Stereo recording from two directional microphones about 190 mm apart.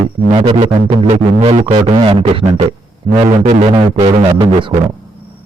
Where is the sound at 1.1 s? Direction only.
40° right (ahead or behind).